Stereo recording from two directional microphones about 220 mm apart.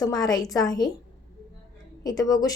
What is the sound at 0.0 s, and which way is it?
Speech, 15° left (ahead or behind).